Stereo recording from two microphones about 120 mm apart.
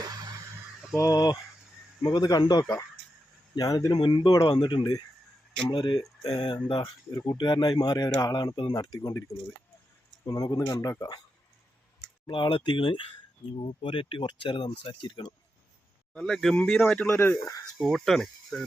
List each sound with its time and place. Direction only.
0.0 s a sound: 35° right (ahead or behind)
0.9 s speech: 30° left (ahead or behind)
3.9 s speech: 45° left (ahead or behind)
4.3 s speech: 30° left (ahead or behind)
12.2 s speech: 40° left (ahead or behind)
16.1 s speech: 5° left (ahead or behind)
17.1 s speech: 20° left (ahead or behind)
17.7 s speech: centre (ahead or behind)